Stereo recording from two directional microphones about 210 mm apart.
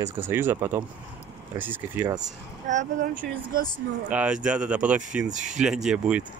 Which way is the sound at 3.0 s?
40° right (ahead or behind).